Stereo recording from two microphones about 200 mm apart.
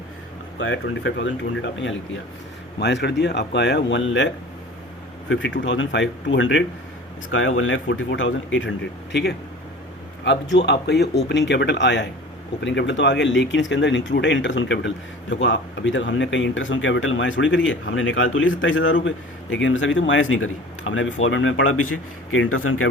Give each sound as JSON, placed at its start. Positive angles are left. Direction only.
{"t": 0.6, "sound": "a man's voice", "side_deg": 70}
{"t": 2.7, "sound": "speech", "side_deg": 55}
{"t": 5.3, "sound": "a man's voice", "side_deg": 70}
{"t": 7.3, "sound": "a man's voice", "side_deg": 80}